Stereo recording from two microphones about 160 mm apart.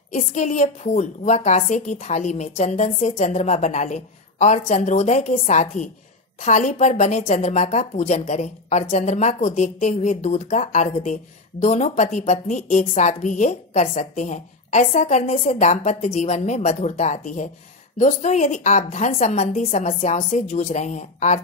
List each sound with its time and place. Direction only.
0.1 s a woman's voice: 50° left (ahead or behind)